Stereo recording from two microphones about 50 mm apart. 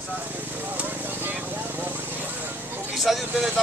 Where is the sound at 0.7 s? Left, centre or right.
Right.